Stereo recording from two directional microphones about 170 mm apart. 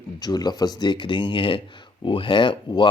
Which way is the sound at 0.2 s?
25° left (ahead or behind).